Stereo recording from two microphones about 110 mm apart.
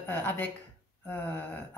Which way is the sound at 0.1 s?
20° left (ahead or behind).